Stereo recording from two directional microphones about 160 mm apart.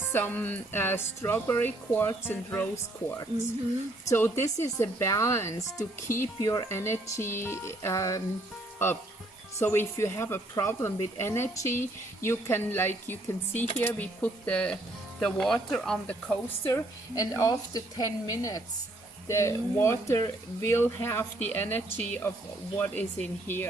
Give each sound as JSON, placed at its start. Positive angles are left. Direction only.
{"t": 0.1, "sound": "speech", "side_deg": 10}
{"t": 9.6, "sound": "speech", "side_deg": 15}
{"t": 16.7, "sound": "a woman's voice", "side_deg": 20}